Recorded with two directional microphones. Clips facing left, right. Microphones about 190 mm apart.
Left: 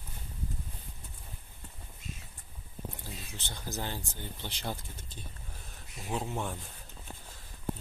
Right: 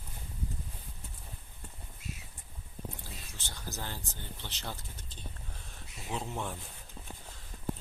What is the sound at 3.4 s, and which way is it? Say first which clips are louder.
Speech: left 4 dB; 15° left (ahead or behind).